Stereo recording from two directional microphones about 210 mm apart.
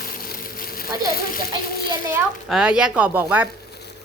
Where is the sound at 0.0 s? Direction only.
40° left (ahead or behind).